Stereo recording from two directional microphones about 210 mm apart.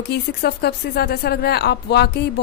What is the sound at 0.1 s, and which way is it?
A woman's voice, 50° left (ahead or behind).